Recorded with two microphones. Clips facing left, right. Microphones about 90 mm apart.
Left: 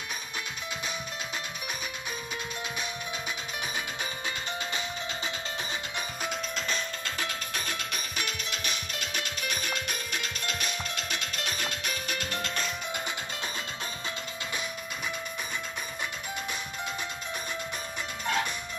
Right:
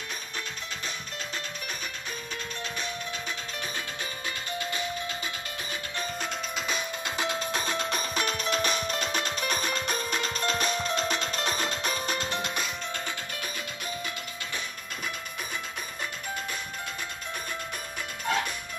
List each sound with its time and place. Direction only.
4.6 s music: 20° left (ahead or behind)
6.2 s music: centre (ahead or behind)
6.7 s music: 20° right (ahead or behind)
12.9 s music: 15° left (ahead or behind)